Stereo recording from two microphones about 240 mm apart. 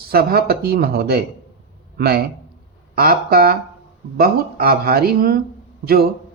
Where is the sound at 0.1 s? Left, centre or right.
Right.